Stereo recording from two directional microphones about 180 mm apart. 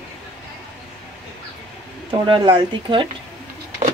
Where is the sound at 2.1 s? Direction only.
25° right (ahead or behind).